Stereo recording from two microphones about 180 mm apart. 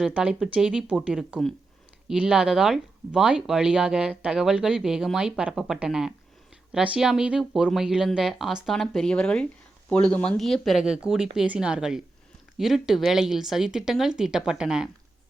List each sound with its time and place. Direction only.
0.0 s speech: 5° right (ahead or behind)